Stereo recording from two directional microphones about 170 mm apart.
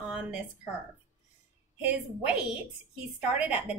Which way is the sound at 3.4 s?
10° right (ahead or behind).